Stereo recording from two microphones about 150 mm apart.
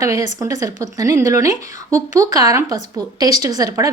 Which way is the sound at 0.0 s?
20° right (ahead or behind).